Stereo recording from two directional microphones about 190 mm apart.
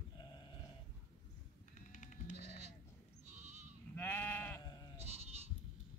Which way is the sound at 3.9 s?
10° left (ahead or behind).